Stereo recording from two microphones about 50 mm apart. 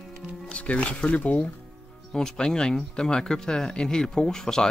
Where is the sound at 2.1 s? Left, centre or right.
Centre.